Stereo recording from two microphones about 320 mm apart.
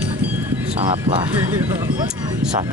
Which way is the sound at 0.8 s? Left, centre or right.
Centre.